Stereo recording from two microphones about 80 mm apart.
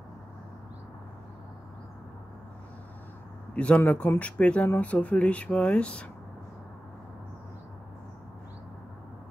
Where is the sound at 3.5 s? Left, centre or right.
Centre.